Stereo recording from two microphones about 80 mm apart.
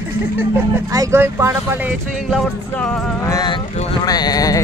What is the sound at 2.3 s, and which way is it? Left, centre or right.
Speech, centre.